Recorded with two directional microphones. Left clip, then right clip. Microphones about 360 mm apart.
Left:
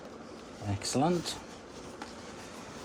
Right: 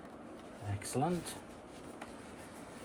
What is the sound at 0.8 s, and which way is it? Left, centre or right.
Speech, left.